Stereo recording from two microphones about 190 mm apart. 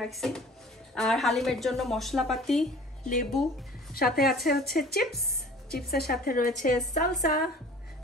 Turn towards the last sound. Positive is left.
turn(degrees=45)  # may be behind; listen again after turning